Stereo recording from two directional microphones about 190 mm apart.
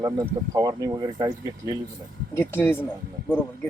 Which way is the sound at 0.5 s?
15° right (ahead or behind).